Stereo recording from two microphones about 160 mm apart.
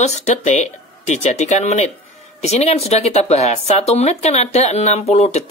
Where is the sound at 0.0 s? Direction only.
45° left (ahead or behind).